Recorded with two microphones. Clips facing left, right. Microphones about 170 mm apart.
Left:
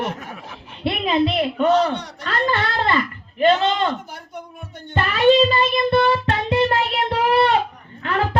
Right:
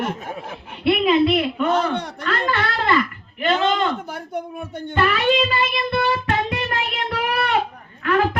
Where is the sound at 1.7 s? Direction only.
55° right (ahead or behind).